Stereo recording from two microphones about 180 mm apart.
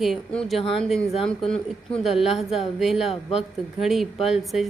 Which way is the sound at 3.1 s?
35° left (ahead or behind).